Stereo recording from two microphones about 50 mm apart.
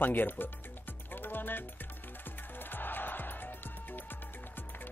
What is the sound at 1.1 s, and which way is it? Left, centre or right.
Music, left.